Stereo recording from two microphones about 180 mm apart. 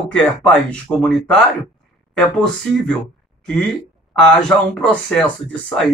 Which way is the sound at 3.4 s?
5° left (ahead or behind).